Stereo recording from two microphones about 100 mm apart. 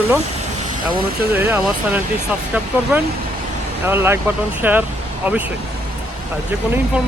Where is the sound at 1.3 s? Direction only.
20° right (ahead or behind).